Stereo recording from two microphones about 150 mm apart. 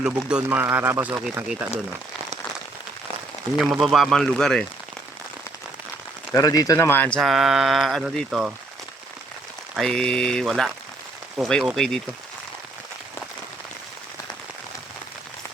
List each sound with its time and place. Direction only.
0.0 s speech: 5° right (ahead or behind)
3.6 s speech: centre (ahead or behind)
6.3 s speech: 25° left (ahead or behind)
7.2 s speech: centre (ahead or behind)
9.7 s speech: 5° left (ahead or behind)